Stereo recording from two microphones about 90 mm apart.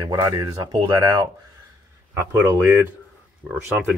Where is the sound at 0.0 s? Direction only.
40° right (ahead or behind).